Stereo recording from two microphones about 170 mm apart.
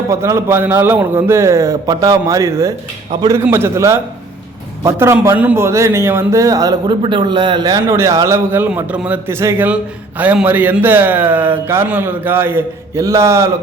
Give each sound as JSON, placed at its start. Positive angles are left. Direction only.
{"t": 0.1, "sound": "a man's voice", "side_deg": -15}